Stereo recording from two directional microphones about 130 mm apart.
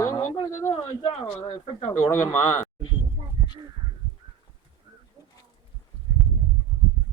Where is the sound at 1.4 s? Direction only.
55° left (ahead or behind).